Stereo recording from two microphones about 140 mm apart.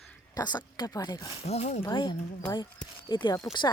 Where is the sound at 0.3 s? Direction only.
30° left (ahead or behind).